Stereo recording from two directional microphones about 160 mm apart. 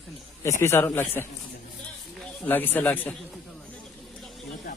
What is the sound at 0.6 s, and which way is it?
Speech, 15° left (ahead or behind).